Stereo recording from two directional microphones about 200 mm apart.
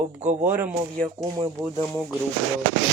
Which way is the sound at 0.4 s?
10° right (ahead or behind).